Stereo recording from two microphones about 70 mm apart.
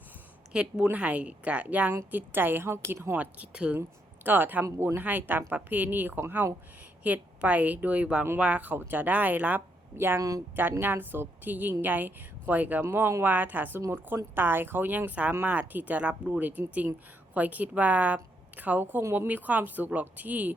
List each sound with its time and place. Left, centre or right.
0.5 s a woman's voice: centre; by 3.2 s right
3.2 s speech: centre
3.8 s a woman's voice: right
7.0 s a woman's voice: right
10.2 s speech: right
10.5 s a woman's voice: right